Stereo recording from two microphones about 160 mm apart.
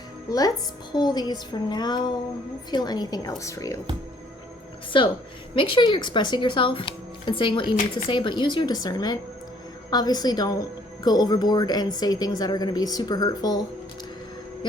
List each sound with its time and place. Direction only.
0.3 s a woman's voice: 25° left (ahead or behind)
4.9 s a woman's voice: 30° left (ahead or behind)